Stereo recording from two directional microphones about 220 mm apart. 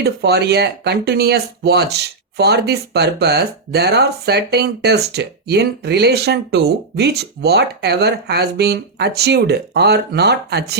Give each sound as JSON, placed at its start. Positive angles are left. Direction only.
{"t": 0.0, "sound": "speech", "side_deg": -45}